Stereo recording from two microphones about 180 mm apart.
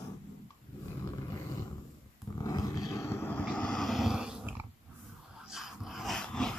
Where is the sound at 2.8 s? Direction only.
15° left (ahead or behind).